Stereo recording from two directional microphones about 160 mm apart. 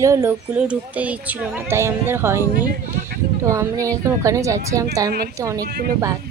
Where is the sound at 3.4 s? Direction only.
20° right (ahead or behind).